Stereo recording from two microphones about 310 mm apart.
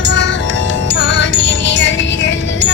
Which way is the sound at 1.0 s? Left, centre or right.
Left.